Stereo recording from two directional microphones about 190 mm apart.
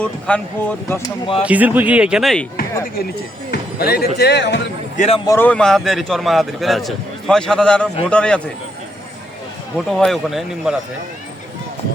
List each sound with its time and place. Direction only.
0.0 s speech: 5° left (ahead or behind)
1.4 s speech: 5° right (ahead or behind)
3.5 s speech: 55° left (ahead or behind)
4.9 s speech: 35° left (ahead or behind)
5.2 s a man's voice: 15° left (ahead or behind)
9.7 s a man's voice: centre (ahead or behind)